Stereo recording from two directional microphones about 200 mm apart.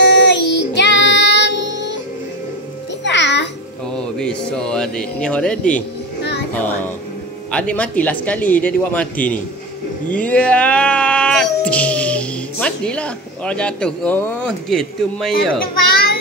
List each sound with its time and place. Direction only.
0.0 s child singing: 60° left (ahead or behind)
3.0 s music: 60° left (ahead or behind)
3.9 s speech: 5° left (ahead or behind)
6.5 s a sound: 10° left (ahead or behind)
7.5 s a man's voice: 5° left (ahead or behind)